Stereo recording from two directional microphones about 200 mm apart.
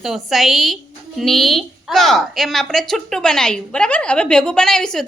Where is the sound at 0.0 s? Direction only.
Centre (ahead or behind).